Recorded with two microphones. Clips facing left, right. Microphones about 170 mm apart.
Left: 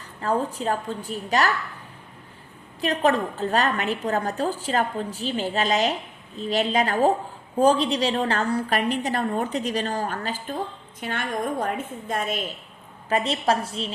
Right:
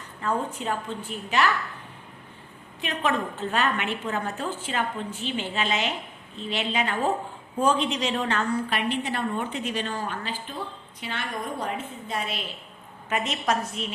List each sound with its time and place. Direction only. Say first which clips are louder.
0.2 s a woman's voice: left 3 dB; 35° left (ahead or behind)
2.8 s a woman's voice: left 5 dB; 35° left (ahead or behind)
13.1 s a woman's voice: left 4 dB; 30° left (ahead or behind)